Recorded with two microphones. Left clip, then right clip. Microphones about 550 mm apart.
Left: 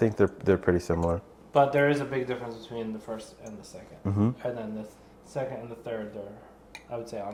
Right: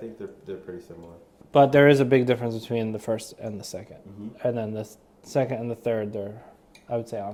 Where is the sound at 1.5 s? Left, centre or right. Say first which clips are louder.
Right 6 dB; right.